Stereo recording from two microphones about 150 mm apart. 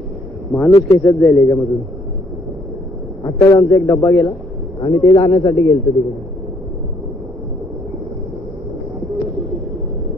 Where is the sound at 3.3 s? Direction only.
25° left (ahead or behind).